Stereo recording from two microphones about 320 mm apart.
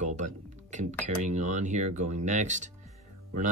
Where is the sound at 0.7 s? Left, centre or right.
Right.